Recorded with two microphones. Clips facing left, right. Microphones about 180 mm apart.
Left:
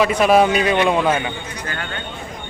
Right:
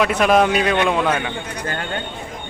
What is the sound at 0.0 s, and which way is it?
Speech, centre (ahead or behind).